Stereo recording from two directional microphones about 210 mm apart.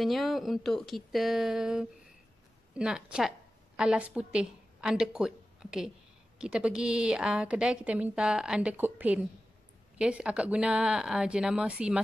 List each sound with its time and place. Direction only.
0.0 s a woman's voice: centre (ahead or behind)